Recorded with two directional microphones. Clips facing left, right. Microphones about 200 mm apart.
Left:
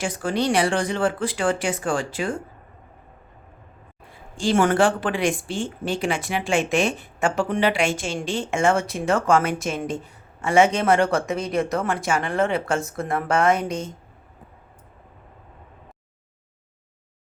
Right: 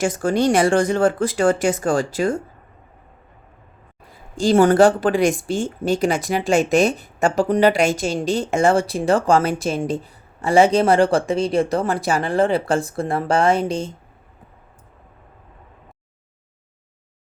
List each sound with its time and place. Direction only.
0.0 s speech: 45° right (ahead or behind)
4.1 s speech: 40° right (ahead or behind)